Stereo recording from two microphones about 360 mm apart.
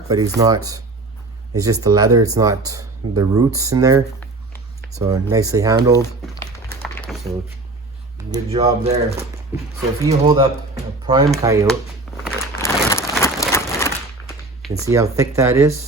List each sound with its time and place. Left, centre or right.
0.3 s speech: centre
5.9 s speech: centre
6.9 s a sound: centre
8.3 s speech: centre
9.5 s speech: centre
12.2 s a sound: centre
15.4 s speech: centre